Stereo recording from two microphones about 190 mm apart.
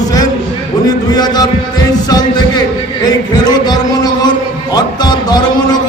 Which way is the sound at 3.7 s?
20° left (ahead or behind).